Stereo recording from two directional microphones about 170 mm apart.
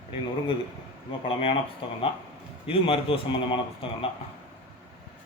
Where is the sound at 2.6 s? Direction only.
30° left (ahead or behind).